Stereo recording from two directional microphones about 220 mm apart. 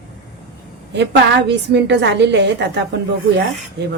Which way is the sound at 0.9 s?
50° right (ahead or behind).